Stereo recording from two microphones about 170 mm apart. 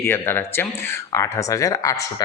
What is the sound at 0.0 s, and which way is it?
Speech, 15° left (ahead or behind).